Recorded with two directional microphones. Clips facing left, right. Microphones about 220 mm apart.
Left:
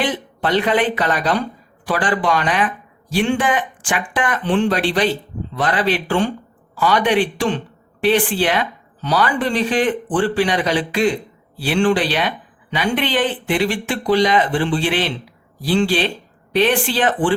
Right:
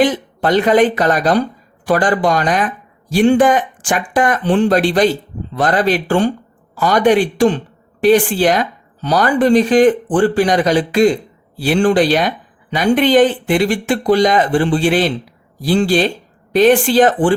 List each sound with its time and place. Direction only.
0.0 s speech: 45° right (ahead or behind)